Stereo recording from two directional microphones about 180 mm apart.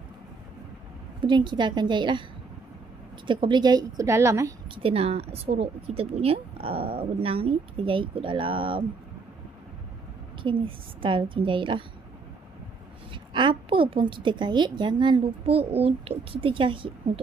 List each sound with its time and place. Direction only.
1.2 s a woman's voice: 25° right (ahead or behind)
3.3 s a woman's voice: 25° right (ahead or behind)
4.6 s speech: 30° right (ahead or behind)
10.4 s a woman's voice: 30° right (ahead or behind)
13.1 s a woman's voice: 25° right (ahead or behind)